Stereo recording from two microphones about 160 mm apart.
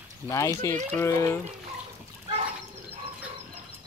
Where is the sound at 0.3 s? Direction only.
20° left (ahead or behind).